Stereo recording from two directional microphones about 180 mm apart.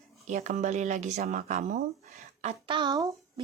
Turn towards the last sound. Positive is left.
turn(degrees=-20)  # may be behind; listen again after turning